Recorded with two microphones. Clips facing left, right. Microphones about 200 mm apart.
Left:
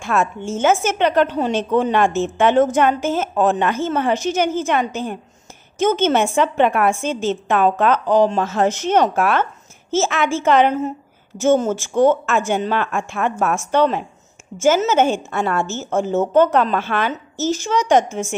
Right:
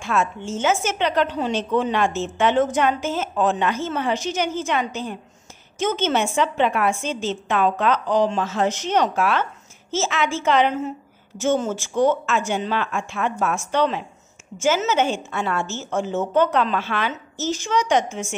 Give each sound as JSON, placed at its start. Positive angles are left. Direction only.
{"t": 0.0, "sound": "a woman's voice", "side_deg": 50}